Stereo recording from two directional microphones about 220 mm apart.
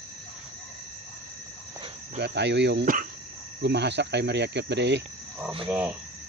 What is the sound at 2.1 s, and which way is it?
Speech, 50° right (ahead or behind).